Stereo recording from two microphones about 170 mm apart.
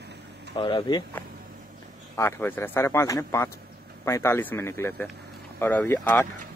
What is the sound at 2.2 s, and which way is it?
Speech, 15° left (ahead or behind).